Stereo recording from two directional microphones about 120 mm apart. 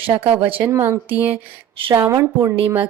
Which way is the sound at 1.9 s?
25° right (ahead or behind).